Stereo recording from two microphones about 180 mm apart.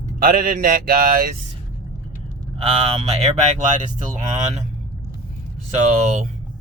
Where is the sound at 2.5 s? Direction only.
35° right (ahead or behind).